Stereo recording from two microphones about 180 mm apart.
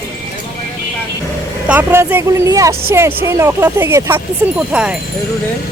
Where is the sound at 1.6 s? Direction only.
10° right (ahead or behind).